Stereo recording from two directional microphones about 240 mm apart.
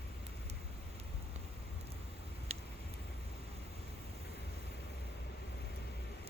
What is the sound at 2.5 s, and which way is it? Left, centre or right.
Vehicle, right.